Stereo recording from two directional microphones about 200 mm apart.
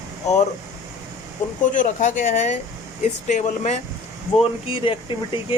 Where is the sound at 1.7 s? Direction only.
40° left (ahead or behind).